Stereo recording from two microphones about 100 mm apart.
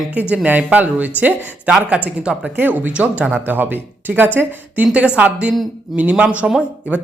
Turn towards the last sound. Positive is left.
turn(degrees=-10)  # may be behind; listen again after turning